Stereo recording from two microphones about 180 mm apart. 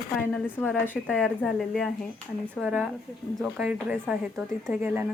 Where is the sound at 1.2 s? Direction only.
Centre (ahead or behind).